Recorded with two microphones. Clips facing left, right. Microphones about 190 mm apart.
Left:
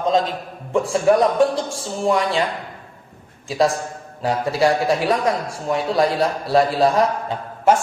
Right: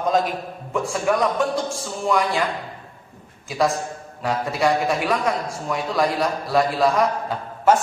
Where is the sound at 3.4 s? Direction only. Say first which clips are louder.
Left 3 dB; 30° left (ahead or behind).